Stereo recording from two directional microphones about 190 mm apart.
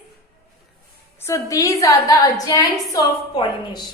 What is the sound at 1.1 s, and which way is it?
A woman's voice, 15° left (ahead or behind).